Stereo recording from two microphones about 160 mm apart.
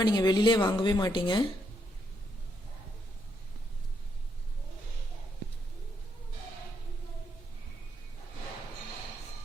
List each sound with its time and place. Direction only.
0.0 s speech: 25° left (ahead or behind)